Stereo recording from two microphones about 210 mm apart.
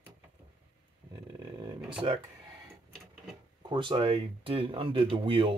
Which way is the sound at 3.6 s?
20° right (ahead or behind).